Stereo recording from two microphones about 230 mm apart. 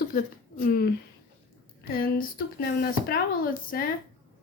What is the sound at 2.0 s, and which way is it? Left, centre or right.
Speech, left.